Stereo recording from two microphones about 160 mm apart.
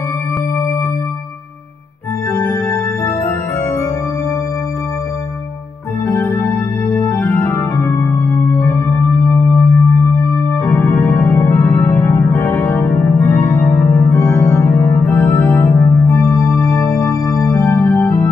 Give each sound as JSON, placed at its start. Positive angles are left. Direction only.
{"t": 6.0, "sound": "music", "side_deg": 15}
{"t": 14.1, "sound": "organ", "side_deg": 20}
{"t": 15.6, "sound": "music", "side_deg": 20}
{"t": 16.3, "sound": "music", "side_deg": 0}